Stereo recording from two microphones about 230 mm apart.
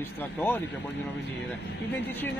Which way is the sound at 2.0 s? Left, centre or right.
Centre.